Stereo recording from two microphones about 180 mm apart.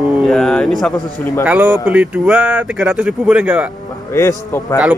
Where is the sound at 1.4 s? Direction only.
10° right (ahead or behind).